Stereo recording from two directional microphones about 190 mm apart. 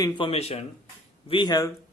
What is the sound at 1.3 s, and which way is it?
Speech, 25° left (ahead or behind).